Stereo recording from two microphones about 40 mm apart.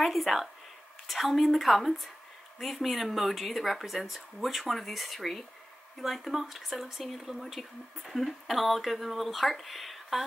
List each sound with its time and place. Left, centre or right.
0.0 s speech: centre